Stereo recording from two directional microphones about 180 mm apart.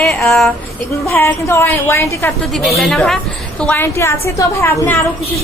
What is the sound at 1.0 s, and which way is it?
A woman's voice, 15° left (ahead or behind).